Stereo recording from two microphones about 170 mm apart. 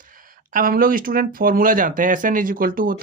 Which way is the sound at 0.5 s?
55° right (ahead or behind).